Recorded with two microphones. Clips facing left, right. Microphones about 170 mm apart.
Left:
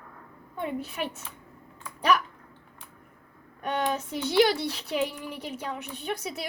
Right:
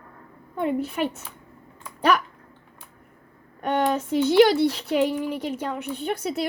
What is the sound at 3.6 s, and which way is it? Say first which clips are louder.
Speech: right 6 dB; 55° right (ahead or behind).